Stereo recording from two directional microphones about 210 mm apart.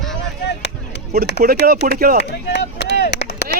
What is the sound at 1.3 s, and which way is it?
Speech, 55° left (ahead or behind).